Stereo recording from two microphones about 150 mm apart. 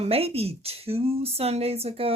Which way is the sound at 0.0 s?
40° right (ahead or behind).